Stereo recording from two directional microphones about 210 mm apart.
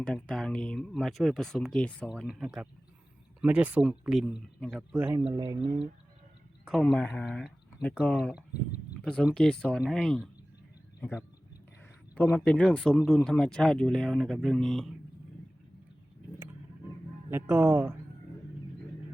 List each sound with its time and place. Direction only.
0.0 s speech: 5° left (ahead or behind)
5.2 s speech: 20° right (ahead or behind)
6.7 s speech: centre (ahead or behind)
17.2 s speech: 10° right (ahead or behind)